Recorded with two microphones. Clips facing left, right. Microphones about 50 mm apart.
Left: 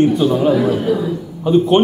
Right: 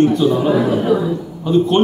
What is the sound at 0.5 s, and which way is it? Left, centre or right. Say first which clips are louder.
Speech: even; centre.